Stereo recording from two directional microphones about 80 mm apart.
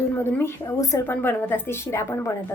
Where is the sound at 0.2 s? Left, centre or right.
Left.